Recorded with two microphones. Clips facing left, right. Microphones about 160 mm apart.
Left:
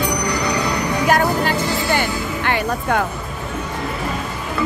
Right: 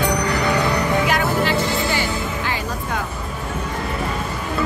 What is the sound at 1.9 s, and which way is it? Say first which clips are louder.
Music: left 2 dB; 60° left (ahead or behind).